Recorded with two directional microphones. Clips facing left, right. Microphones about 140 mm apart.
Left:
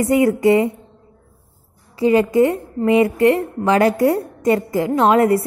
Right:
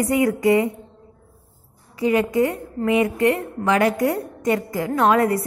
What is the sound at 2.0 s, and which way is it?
A woman's voice, 30° left (ahead or behind).